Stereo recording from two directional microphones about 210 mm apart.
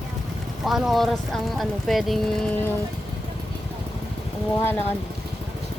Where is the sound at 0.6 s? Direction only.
Centre (ahead or behind).